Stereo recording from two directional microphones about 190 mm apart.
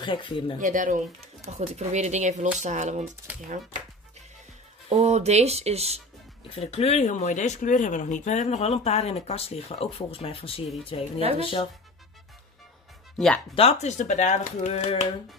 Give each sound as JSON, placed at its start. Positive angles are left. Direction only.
{"t": 0.0, "sound": "speech", "side_deg": 25}
{"t": 0.6, "sound": "speech", "side_deg": -40}
{"t": 3.3, "sound": "speech", "side_deg": -10}
{"t": 4.8, "sound": "speech", "side_deg": -35}
{"t": 6.5, "sound": "speech", "side_deg": 30}
{"t": 13.6, "sound": "speech", "side_deg": 35}